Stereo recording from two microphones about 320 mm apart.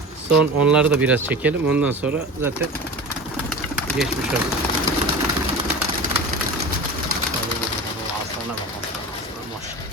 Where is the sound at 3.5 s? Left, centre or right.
Centre.